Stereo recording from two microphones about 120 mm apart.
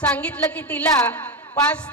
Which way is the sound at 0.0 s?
10° left (ahead or behind).